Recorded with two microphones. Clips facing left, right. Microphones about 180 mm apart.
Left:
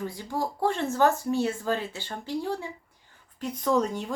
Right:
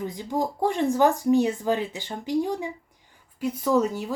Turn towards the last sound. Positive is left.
turn(degrees=-5)  # may be behind; listen again after turning